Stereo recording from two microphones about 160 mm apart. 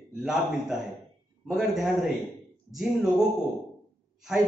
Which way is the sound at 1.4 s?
Centre (ahead or behind).